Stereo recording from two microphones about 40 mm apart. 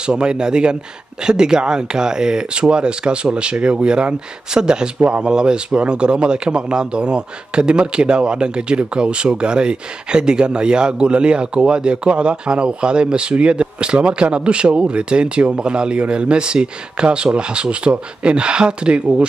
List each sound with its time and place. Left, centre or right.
0.0 s a man's voice: right